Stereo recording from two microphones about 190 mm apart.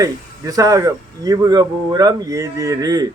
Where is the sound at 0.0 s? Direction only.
20° right (ahead or behind).